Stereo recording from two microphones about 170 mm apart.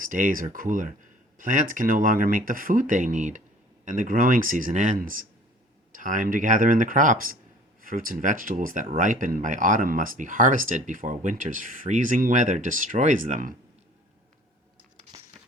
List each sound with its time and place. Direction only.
0.0 s speech: 50° right (ahead or behind)